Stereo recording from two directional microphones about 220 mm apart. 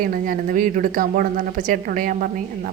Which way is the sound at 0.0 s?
40° right (ahead or behind).